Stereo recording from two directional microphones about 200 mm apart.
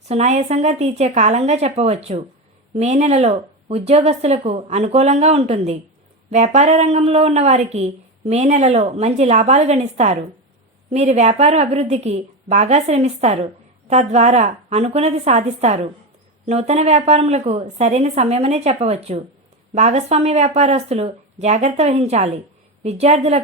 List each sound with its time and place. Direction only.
0.1 s speech: 35° right (ahead or behind)